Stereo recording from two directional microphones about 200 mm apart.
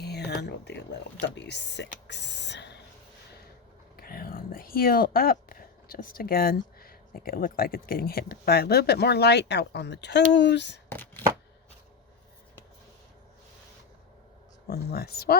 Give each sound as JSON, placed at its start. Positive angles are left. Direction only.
{"t": 0.0, "sound": "a sound", "side_deg": 55}
{"t": 1.2, "sound": "speech", "side_deg": 60}
{"t": 2.0, "sound": "a sound", "side_deg": 60}
{"t": 3.9, "sound": "speech", "side_deg": 45}
{"t": 10.8, "sound": "chopping", "side_deg": 10}
{"t": 14.7, "sound": "speech", "side_deg": 50}